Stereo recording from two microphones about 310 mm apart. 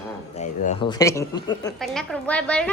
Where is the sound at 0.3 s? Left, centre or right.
Left.